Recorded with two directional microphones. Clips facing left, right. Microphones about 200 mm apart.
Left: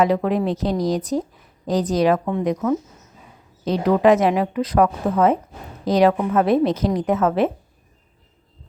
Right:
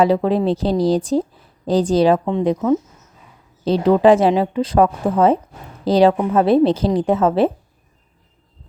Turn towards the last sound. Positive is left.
turn(degrees=-30)  # may be behind; listen again after turning